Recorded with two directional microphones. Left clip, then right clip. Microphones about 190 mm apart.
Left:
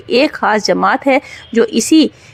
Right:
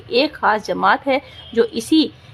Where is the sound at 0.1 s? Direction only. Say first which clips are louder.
Left 4 dB; 30° left (ahead or behind).